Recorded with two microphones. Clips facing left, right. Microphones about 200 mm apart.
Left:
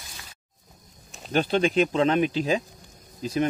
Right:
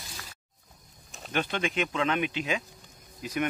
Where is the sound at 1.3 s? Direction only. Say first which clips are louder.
Left 8 dB; 35° left (ahead or behind).